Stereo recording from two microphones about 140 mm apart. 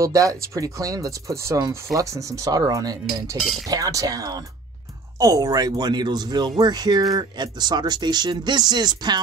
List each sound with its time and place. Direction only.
0.0 s speech: 25° right (ahead or behind)